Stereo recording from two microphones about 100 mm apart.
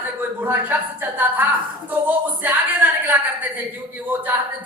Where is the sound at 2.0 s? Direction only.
20° right (ahead or behind).